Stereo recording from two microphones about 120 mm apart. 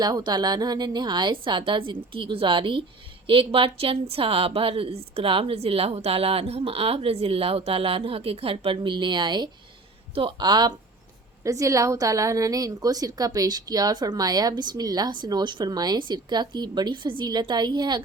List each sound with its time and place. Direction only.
0.0 s a woman's voice: 35° right (ahead or behind)